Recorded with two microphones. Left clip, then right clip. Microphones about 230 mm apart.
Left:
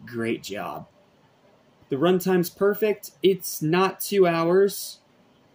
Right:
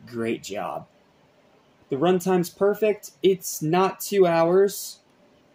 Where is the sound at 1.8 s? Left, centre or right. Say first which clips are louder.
Even; centre.